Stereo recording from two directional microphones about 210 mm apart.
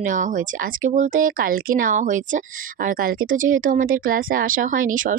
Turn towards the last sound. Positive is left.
turn(degrees=-40)  # may be behind; listen again after turning